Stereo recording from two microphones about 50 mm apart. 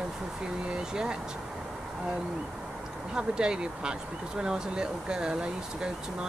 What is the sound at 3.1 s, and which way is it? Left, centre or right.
Speech, centre.